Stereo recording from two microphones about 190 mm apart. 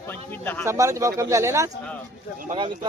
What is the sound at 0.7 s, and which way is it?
A man's voice, 15° right (ahead or behind).